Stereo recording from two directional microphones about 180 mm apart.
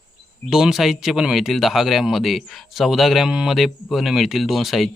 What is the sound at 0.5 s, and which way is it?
Speech, centre (ahead or behind).